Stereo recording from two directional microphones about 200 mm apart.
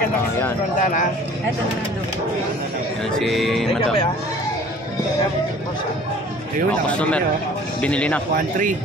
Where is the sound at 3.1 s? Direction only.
Centre (ahead or behind).